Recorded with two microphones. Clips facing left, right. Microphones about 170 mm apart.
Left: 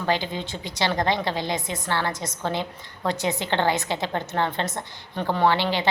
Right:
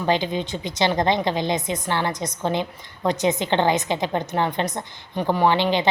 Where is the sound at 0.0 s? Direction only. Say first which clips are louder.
Right 4 dB; 20° right (ahead or behind).